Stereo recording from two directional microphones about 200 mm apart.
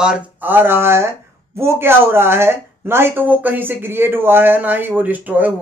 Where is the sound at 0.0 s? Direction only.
5° right (ahead or behind).